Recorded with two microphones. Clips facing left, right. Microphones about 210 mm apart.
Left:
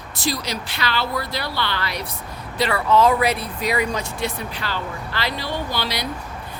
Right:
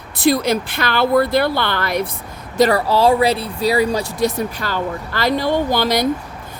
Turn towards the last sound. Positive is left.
turn(degrees=-45)  # may be behind; listen again after turning